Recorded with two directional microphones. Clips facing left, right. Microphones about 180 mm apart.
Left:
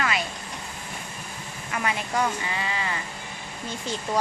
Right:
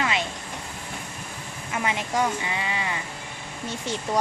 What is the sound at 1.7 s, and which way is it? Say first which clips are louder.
Speech: right 1 dB; 20° right (ahead or behind).